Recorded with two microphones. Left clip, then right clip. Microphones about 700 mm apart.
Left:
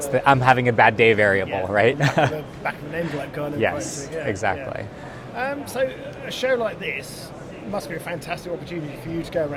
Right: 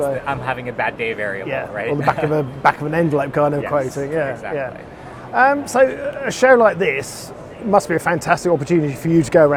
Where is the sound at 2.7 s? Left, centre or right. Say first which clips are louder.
Right 11 dB; right.